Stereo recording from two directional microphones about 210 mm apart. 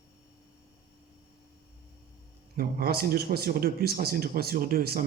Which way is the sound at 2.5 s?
45° right (ahead or behind).